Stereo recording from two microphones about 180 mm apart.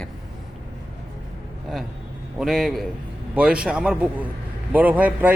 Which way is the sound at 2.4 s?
Centre (ahead or behind).